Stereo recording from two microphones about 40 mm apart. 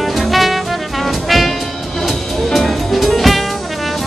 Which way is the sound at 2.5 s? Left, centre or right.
Centre.